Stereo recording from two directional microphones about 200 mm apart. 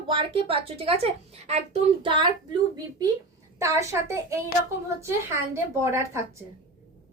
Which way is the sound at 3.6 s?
15° right (ahead or behind).